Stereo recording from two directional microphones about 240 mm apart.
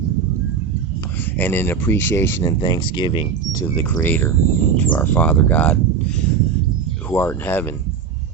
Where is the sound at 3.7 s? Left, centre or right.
Centre.